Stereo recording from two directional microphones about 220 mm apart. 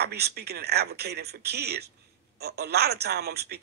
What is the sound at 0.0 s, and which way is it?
A man's voice, 45° right (ahead or behind).